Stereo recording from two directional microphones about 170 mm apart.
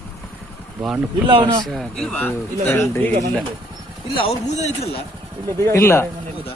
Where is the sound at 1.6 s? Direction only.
Centre (ahead or behind).